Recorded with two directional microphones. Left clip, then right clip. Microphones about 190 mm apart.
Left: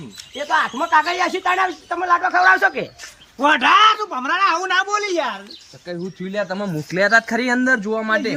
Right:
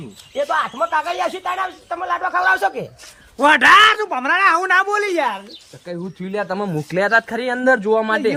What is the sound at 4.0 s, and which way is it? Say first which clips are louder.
A woman's voice: right 3 dB; 15° right (ahead or behind).